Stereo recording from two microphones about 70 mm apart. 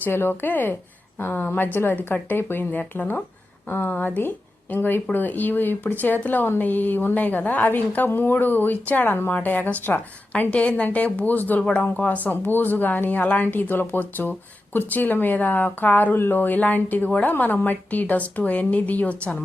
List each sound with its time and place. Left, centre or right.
0.0 s speech: left